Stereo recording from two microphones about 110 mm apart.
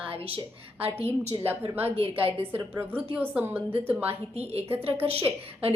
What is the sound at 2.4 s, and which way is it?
A woman's voice, 20° right (ahead or behind).